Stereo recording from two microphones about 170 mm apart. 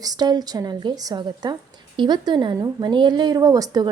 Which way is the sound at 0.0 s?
25° right (ahead or behind).